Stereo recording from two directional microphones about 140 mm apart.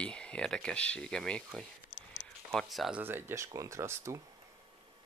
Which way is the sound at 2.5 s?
Centre (ahead or behind).